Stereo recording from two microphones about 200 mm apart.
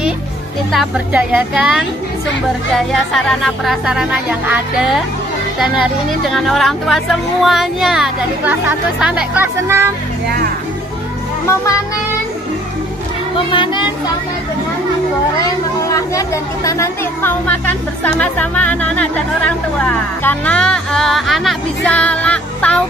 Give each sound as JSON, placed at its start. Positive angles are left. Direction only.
{"t": 0.7, "sound": "speech", "side_deg": -5}
{"t": 11.4, "sound": "speech", "side_deg": 15}
{"t": 13.5, "sound": "speech", "side_deg": 25}
{"t": 15.9, "sound": "speech", "side_deg": 15}